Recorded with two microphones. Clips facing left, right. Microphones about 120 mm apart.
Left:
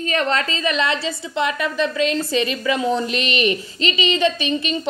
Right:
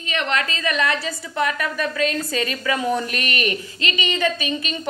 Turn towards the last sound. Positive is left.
turn(degrees=30)  # may be behind; listen again after turning